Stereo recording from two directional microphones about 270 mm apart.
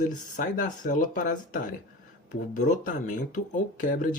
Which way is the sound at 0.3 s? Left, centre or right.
Left.